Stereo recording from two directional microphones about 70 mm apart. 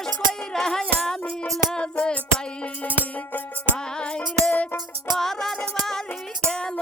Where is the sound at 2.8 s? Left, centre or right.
Left.